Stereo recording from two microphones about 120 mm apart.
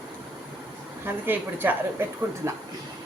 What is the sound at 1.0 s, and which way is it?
A woman's voice, 15° right (ahead or behind).